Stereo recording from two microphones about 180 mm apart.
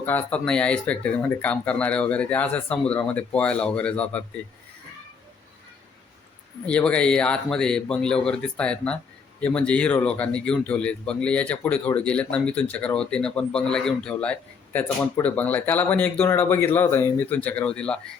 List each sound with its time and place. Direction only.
0.0 s speech: 10° left (ahead or behind)
6.7 s speech: 5° left (ahead or behind)